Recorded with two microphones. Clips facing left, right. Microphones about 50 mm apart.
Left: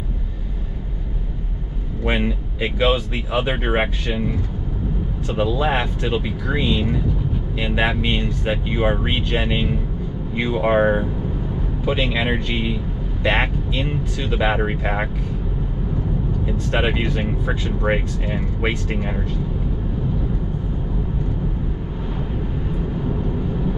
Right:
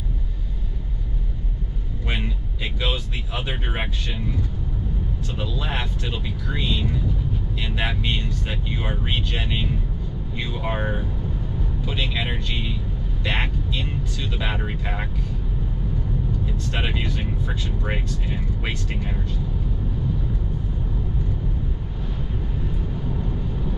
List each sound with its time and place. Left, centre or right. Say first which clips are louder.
2.0 s speech: left 8 dB; left
16.4 s speech: left 7 dB; left